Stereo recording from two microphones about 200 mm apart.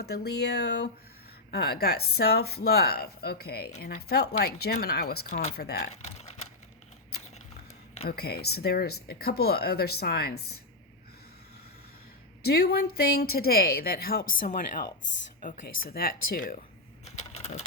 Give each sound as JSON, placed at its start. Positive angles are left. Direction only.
{"t": 0.0, "sound": "speech", "side_deg": 55}
{"t": 5.3, "sound": "speech", "side_deg": 35}
{"t": 5.5, "sound": "speech", "side_deg": 50}
{"t": 5.9, "sound": "speech", "side_deg": 35}
{"t": 8.0, "sound": "speech", "side_deg": 50}
{"t": 12.4, "sound": "speech", "side_deg": 50}
{"t": 17.1, "sound": "keys jangling", "side_deg": 30}